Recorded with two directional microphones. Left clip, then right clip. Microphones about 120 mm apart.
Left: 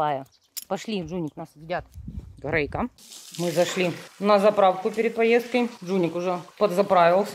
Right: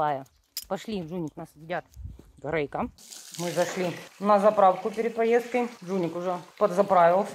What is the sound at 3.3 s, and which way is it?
Speech, 45° left (ahead or behind).